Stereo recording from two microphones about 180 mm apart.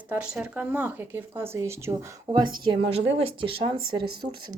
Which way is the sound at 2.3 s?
25° right (ahead or behind).